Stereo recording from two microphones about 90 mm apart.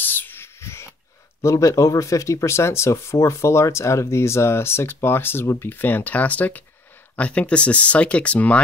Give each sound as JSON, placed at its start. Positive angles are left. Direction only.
{"t": 0.0, "sound": "whispering", "side_deg": 20}
{"t": 1.4, "sound": "speech", "side_deg": 35}